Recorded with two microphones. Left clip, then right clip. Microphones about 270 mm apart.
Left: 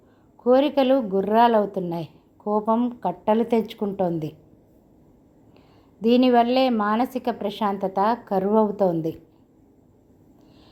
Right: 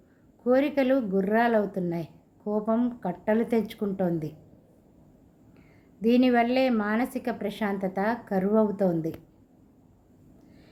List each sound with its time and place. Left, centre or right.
0.4 s a woman's voice: centre
6.0 s a woman's voice: centre